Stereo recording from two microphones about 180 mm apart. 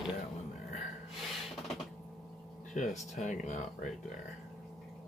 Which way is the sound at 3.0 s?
45° left (ahead or behind).